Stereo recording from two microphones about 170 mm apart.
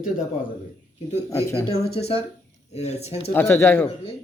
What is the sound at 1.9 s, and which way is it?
Speech, 35° left (ahead or behind).